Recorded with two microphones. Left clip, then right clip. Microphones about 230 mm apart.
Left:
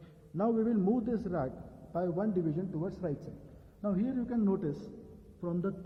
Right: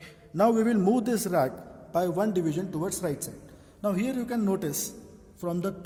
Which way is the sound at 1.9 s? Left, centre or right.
Right.